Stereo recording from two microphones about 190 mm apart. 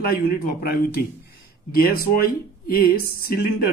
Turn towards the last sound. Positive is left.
turn(degrees=50)  # may be behind; listen again after turning